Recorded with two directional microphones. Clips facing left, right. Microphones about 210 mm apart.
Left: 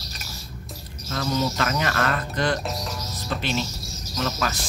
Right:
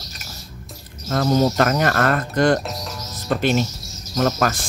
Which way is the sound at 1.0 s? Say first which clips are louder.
Right 7 dB; 45° right (ahead or behind).